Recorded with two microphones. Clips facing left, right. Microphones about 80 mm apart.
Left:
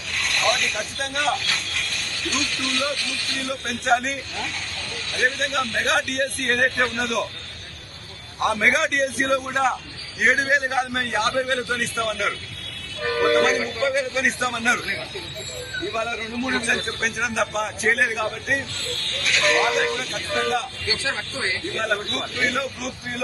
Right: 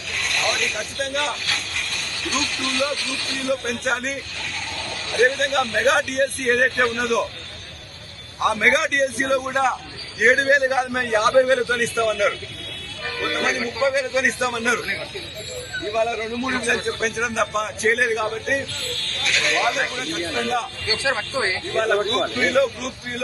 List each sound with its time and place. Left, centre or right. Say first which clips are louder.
0.1 s a man's voice: left 1 dB; centre
8.4 s a man's voice: right 1 dB; centre
13.4 s a man's voice: even; centre
20.8 s speech: right 4 dB; right
22.4 s a man's voice: right 4 dB; centre